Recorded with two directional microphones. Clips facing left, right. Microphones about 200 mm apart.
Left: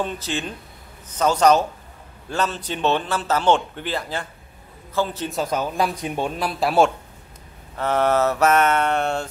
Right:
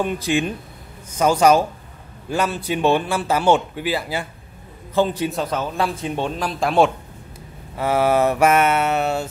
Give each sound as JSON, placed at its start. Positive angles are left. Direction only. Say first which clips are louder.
{"t": 0.0, "sound": "speech", "louder": "right 6 dB", "side_deg": -10}
{"t": 5.3, "sound": "a man's voice", "louder": "even", "side_deg": 5}
{"t": 7.7, "sound": "speech", "louder": "right 2 dB", "side_deg": -10}